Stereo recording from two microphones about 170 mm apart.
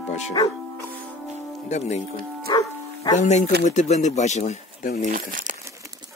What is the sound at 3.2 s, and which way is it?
Speech, 45° left (ahead or behind).